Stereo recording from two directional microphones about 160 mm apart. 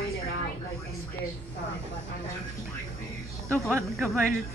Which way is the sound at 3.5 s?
15° right (ahead or behind).